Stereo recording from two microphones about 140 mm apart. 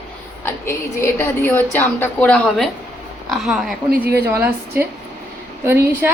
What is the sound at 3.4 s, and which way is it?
Speech, 5° right (ahead or behind).